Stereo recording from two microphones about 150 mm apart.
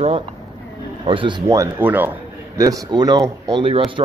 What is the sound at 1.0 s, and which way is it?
Speech, 35° right (ahead or behind).